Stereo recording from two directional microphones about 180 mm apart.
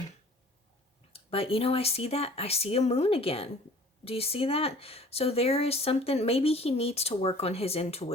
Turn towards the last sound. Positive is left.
turn(degrees=35)  # may be behind; listen again after turning